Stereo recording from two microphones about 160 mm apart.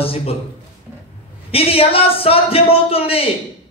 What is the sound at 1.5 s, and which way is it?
A man's voice, 35° left (ahead or behind).